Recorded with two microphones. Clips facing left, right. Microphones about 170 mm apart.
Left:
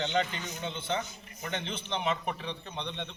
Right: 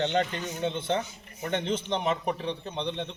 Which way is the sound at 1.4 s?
45° right (ahead or behind).